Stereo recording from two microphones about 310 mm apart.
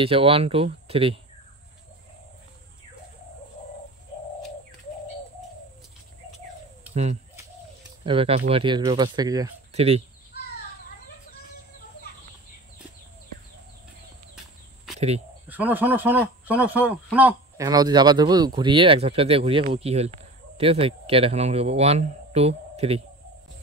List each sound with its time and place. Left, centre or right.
0.0 s a man's voice: centre
6.9 s bird: right
8.0 s a man's voice: centre
15.0 s speech: right
15.4 s a man's voice: centre